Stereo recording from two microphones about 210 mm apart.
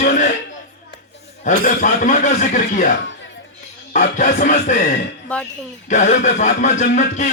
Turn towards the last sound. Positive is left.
turn(degrees=35)  # may be behind; listen again after turning